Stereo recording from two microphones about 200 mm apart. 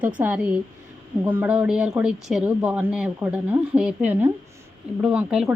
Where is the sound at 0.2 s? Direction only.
10° right (ahead or behind).